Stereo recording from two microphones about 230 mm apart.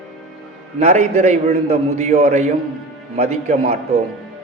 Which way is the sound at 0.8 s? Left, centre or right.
Right.